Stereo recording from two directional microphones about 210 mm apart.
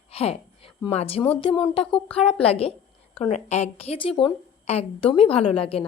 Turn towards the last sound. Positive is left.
turn(degrees=30)  # may be behind; listen again after turning